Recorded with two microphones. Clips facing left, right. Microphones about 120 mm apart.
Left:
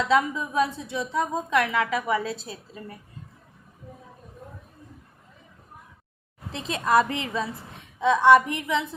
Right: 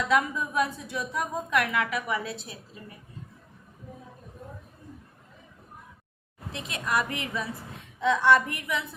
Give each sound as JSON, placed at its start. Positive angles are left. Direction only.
{"t": 0.0, "sound": "a woman's voice", "side_deg": 25}
{"t": 6.5, "sound": "a woman's voice", "side_deg": 30}